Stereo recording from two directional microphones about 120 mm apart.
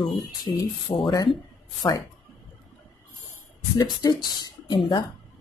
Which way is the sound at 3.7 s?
35° left (ahead or behind).